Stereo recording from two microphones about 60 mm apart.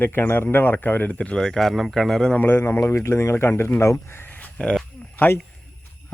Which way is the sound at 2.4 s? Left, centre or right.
Left.